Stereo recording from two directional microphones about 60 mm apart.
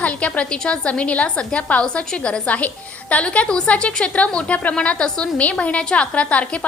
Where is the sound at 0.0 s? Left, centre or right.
Left.